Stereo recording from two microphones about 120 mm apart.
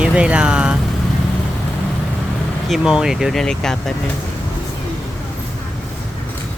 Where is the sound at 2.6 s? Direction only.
5° right (ahead or behind).